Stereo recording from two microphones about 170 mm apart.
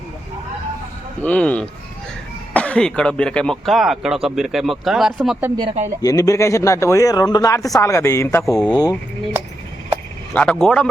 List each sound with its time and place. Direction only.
1.2 s speech: 10° left (ahead or behind)
6.0 s speech: 20° left (ahead or behind)
10.3 s speech: 5° left (ahead or behind)